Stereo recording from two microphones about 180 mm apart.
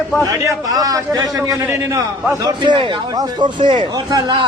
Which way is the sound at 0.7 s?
20° right (ahead or behind).